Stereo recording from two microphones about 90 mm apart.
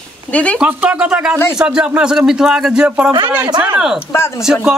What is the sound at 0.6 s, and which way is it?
Speech, 15° right (ahead or behind).